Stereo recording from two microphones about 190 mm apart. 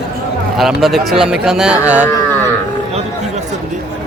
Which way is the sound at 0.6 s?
Centre (ahead or behind).